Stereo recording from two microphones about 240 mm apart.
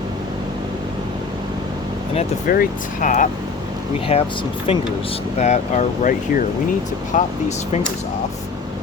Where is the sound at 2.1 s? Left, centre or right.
Left.